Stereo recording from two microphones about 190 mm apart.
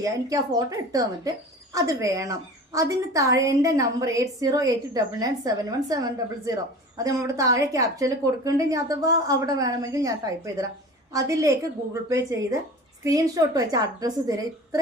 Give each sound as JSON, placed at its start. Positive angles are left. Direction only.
{"t": 0.0, "sound": "a woman's voice", "side_deg": -15}